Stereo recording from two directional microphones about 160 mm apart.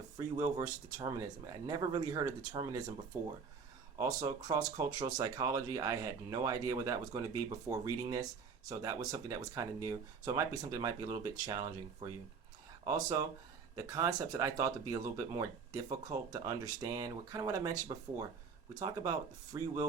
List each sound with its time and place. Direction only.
0.3 s speech: 25° right (ahead or behind)
3.1 s speech: 15° right (ahead or behind)